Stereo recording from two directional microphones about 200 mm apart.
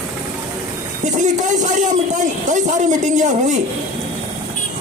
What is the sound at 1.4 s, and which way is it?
A man's voice, 40° right (ahead or behind).